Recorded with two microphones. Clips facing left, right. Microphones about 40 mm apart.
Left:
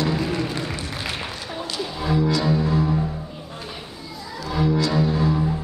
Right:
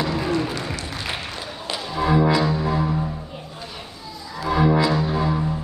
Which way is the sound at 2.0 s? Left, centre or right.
Right.